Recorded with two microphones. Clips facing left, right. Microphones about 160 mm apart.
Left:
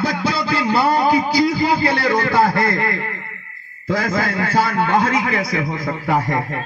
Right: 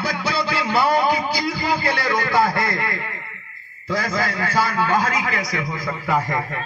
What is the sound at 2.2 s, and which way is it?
Speech, 45° left (ahead or behind).